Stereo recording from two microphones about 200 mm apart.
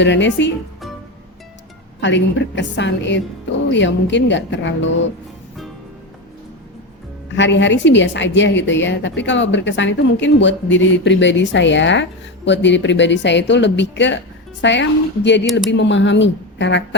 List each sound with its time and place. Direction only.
0.0 s a woman's voice: 65° left (ahead or behind)
2.0 s a woman's voice: 65° left (ahead or behind)
7.3 s a woman's voice: 65° left (ahead or behind)